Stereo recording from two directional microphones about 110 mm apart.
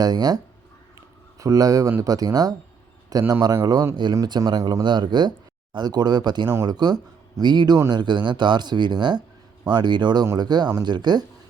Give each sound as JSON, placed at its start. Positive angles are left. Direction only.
{"t": 0.0, "sound": "speech", "side_deg": -35}
{"t": 1.4, "sound": "a man's voice", "side_deg": -30}